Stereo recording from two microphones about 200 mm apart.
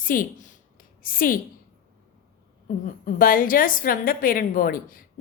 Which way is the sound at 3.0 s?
45° left (ahead or behind).